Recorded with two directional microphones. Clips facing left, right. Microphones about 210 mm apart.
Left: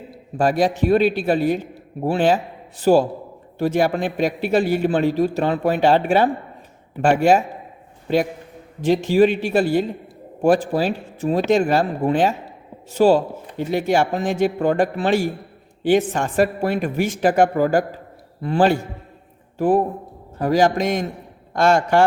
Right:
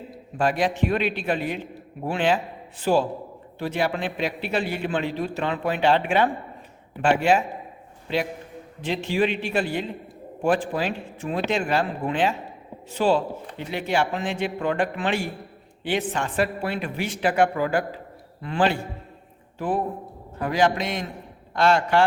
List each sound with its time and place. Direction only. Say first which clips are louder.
0.3 s a man's voice: left 4 dB; 40° left (ahead or behind)